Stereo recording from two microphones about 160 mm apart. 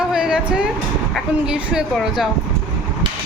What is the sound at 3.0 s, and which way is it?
Hammer, 30° right (ahead or behind).